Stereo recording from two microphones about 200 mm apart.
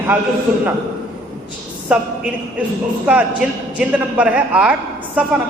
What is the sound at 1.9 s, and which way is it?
Speech, 5° right (ahead or behind).